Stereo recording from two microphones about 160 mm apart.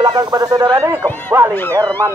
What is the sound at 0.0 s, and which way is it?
A man's voice, 25° right (ahead or behind).